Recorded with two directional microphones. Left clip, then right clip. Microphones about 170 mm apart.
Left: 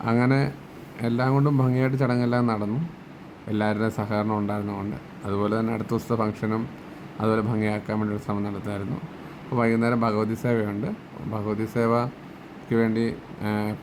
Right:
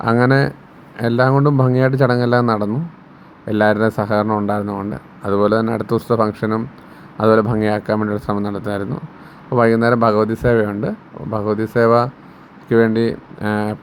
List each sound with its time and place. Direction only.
0.0 s speech: 30° right (ahead or behind)